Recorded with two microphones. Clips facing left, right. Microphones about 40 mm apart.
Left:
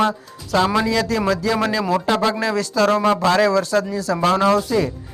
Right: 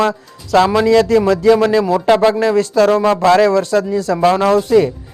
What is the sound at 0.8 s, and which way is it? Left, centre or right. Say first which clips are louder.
Speech: right 8 dB; right.